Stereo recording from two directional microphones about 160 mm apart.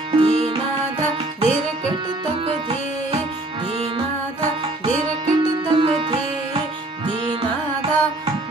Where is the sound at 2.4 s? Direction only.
35° right (ahead or behind).